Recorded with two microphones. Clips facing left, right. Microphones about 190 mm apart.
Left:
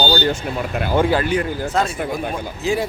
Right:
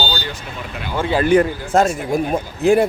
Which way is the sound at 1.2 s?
50° right (ahead or behind).